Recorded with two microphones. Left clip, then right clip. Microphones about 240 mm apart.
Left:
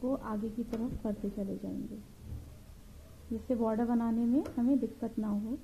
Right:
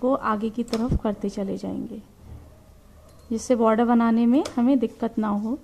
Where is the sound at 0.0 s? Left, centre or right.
Right.